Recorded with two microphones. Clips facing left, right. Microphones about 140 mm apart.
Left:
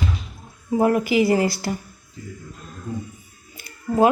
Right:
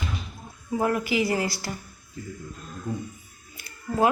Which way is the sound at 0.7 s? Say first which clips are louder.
Left 6 dB; 25° left (ahead or behind).